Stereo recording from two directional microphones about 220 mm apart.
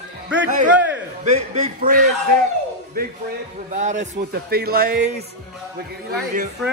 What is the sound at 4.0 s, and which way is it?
A man's voice, 45° right (ahead or behind).